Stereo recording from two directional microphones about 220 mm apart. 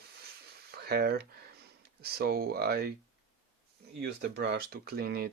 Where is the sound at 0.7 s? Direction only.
45° right (ahead or behind).